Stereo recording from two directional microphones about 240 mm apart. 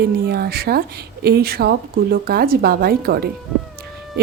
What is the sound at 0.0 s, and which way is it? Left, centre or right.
Speech, right.